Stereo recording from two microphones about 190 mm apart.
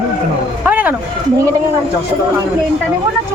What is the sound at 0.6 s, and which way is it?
Speech, 10° right (ahead or behind).